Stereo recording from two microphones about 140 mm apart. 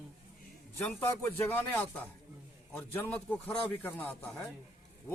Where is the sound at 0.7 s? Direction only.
15° left (ahead or behind).